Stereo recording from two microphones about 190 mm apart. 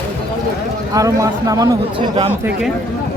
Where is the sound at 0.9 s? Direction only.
15° right (ahead or behind).